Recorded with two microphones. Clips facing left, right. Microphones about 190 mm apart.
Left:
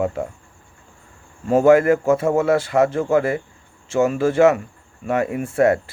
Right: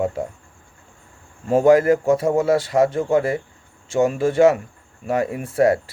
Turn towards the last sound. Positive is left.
turn(degrees=-30)  # may be behind; listen again after turning